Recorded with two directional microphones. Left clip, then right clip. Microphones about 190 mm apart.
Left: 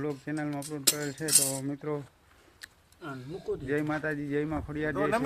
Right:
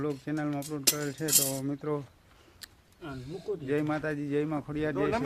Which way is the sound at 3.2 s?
10° right (ahead or behind).